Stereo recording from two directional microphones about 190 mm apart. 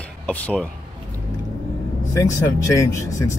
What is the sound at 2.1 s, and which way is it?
Speech, 15° left (ahead or behind).